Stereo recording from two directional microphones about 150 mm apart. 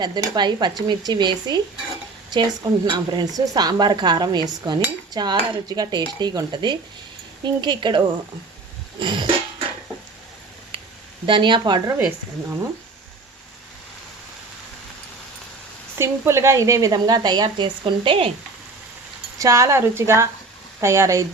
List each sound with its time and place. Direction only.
0.0 s a woman's voice: 30° right (ahead or behind)
9.0 s music: 35° right (ahead or behind)
11.3 s speech: 35° right (ahead or behind)
11.9 s speech: 15° right (ahead or behind)
16.0 s a woman's voice: 15° right (ahead or behind); by 18.3 s 35° right (ahead or behind)
19.4 s a woman's voice: 20° right (ahead or behind)